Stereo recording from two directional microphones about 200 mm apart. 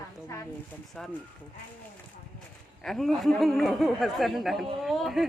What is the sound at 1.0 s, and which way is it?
Speech, centre (ahead or behind).